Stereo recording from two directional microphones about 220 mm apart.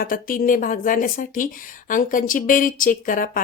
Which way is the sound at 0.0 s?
40° left (ahead or behind).